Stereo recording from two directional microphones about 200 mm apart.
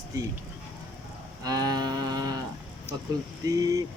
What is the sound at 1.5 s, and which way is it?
Cattle, 20° right (ahead or behind).